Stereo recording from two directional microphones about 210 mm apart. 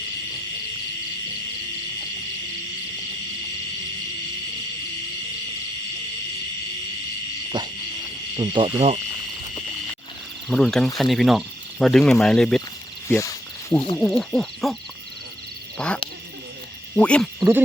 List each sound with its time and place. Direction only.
7.6 s owl: 20° right (ahead or behind)
8.4 s cricket: 20° right (ahead or behind)
10.5 s speech: centre (ahead or behind)
13.1 s a sound: 15° left (ahead or behind)
13.9 s speech: centre (ahead or behind)
15.8 s speech: 5° left (ahead or behind)